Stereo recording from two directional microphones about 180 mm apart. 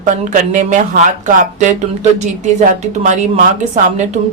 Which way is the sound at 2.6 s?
45° right (ahead or behind).